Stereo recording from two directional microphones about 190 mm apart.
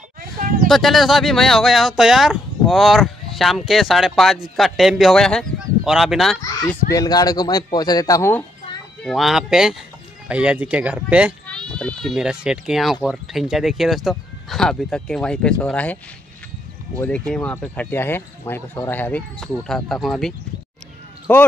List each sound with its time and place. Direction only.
0.7 s speech: centre (ahead or behind)
6.4 s speech: 20° left (ahead or behind)
9.0 s speech: centre (ahead or behind)
11.4 s speech: 5° left (ahead or behind)
17.3 s speech: 5° left (ahead or behind)